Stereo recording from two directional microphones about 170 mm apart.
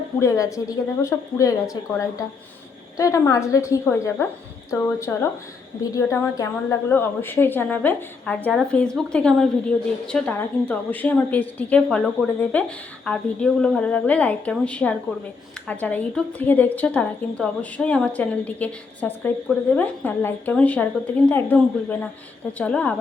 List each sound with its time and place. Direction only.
0.2 s a woman's voice: 20° left (ahead or behind)